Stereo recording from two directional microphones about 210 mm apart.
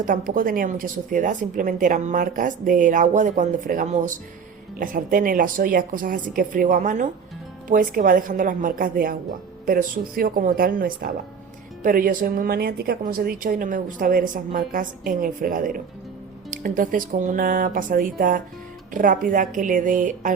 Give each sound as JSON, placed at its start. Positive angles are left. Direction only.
{"t": 0.0, "sound": "a woman's voice", "side_deg": -40}